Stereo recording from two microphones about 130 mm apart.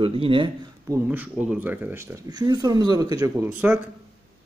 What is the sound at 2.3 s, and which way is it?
Speech, 30° right (ahead or behind).